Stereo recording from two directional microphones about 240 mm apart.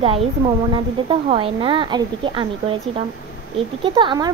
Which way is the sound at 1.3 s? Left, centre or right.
Right.